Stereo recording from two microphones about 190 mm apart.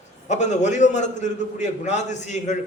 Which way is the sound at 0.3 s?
40° left (ahead or behind).